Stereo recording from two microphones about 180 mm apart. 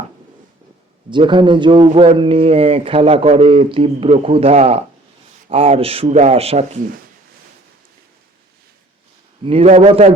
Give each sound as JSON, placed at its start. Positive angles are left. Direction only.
{"t": 1.1, "sound": "speech", "side_deg": -25}
{"t": 9.4, "sound": "speech", "side_deg": -35}